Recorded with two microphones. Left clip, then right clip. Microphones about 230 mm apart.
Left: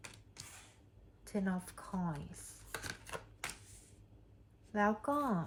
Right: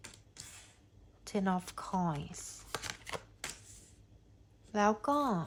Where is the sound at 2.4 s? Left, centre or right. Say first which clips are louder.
Right 5 dB; centre.